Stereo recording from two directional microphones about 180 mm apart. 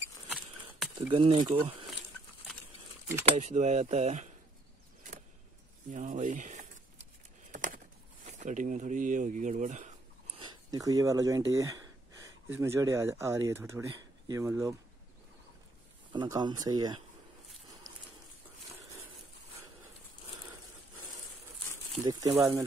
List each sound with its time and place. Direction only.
0.3 s a sound: centre (ahead or behind)
1.1 s speech: 30° right (ahead or behind)
3.3 s speech: 40° right (ahead or behind)
5.9 s a sound: 45° right (ahead or behind)
8.3 s speech: 40° right (ahead or behind)
10.4 s speech: 20° right (ahead or behind)
16.1 s speech: 25° right (ahead or behind)
22.4 s speech: 15° right (ahead or behind)